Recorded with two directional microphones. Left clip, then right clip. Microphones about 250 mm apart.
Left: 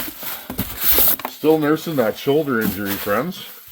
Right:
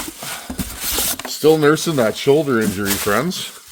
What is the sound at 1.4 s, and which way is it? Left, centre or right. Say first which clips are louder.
Speech: right 4 dB; right.